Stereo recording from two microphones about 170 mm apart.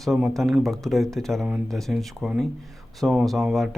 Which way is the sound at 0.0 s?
Centre (ahead or behind).